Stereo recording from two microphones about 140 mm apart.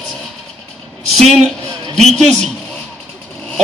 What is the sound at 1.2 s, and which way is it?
A man's voice, centre (ahead or behind).